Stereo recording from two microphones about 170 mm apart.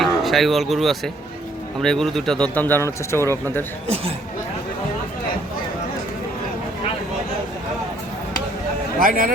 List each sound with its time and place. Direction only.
0.0 s speech: centre (ahead or behind)
9.0 s a man's voice: 55° right (ahead or behind)